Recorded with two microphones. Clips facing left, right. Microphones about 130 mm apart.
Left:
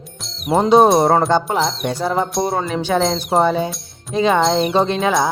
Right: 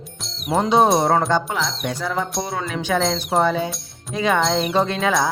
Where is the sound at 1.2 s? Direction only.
35° left (ahead or behind).